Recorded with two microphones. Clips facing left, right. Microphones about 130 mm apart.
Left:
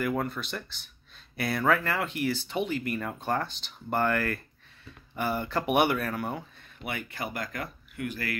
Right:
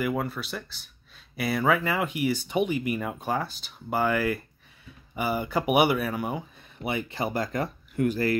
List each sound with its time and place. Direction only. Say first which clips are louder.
0.0 s speech: right 1 dB; 5° right (ahead or behind)
6.8 s speech: right 6 dB; 25° right (ahead or behind)